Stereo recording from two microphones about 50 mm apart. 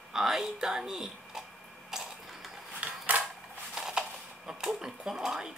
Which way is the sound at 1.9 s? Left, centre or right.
Centre.